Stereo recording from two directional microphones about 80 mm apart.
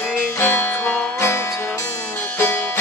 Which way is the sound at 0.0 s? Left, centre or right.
Left.